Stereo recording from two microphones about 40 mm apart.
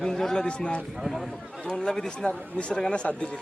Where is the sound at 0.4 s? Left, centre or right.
Left.